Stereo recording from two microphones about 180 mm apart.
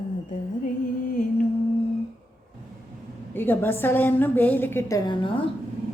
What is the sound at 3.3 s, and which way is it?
A woman's voice, 10° left (ahead or behind).